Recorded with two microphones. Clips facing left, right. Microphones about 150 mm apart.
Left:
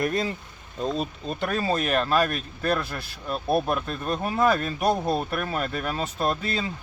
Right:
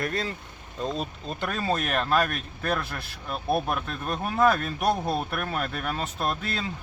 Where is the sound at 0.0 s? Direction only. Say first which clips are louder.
Left 4 dB; 15° left (ahead or behind).